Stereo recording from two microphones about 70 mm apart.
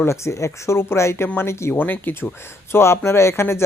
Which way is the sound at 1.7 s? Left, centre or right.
Left.